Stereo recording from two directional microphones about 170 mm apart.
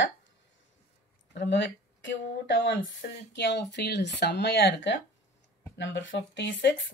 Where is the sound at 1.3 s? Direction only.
90° left.